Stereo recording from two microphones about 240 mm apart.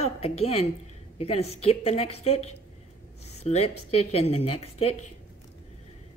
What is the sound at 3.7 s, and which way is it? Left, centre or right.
Speech, left.